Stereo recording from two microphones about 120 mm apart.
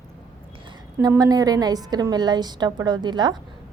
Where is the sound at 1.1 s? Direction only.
30° right (ahead or behind).